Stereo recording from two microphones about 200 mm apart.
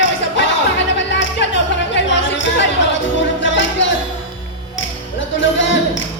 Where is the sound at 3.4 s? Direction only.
65° left (ahead or behind).